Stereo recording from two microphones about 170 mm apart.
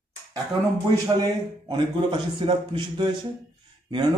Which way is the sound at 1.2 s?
25° right (ahead or behind).